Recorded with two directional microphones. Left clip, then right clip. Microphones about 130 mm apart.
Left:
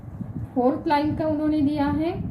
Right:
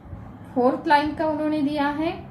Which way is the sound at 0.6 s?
50° right (ahead or behind).